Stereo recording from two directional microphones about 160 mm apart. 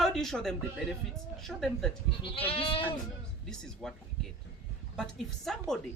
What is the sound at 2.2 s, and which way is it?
Speech, 35° left (ahead or behind).